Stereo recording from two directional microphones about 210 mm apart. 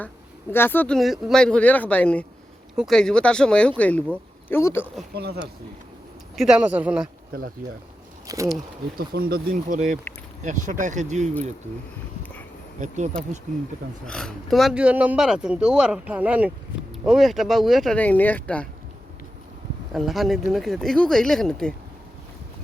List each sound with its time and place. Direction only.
0.5 s speech: 10° left (ahead or behind)
5.1 s speech: 50° right (ahead or behind)
6.3 s speech: 5° right (ahead or behind)
7.3 s speech: 45° right (ahead or behind)
8.3 s speech: 15° right (ahead or behind)
9.0 s speech: 45° right (ahead or behind)
14.1 s speech: 5° left (ahead or behind)
19.9 s speech: centre (ahead or behind)